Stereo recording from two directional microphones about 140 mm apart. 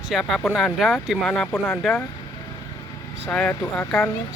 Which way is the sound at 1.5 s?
15° left (ahead or behind).